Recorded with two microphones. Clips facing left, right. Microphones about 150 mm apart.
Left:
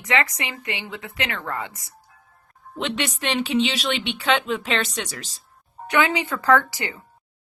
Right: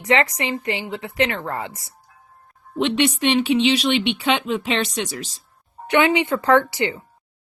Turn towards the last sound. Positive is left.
turn(degrees=-25)  # may be behind; listen again after turning